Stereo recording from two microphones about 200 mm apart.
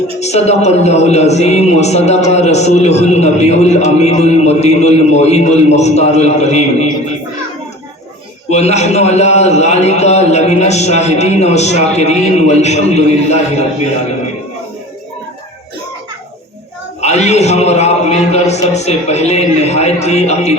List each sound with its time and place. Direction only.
0.2 s a man's voice: 35° left (ahead or behind)
8.4 s a man's voice: 35° left (ahead or behind)
17.0 s a man's voice: 35° left (ahead or behind)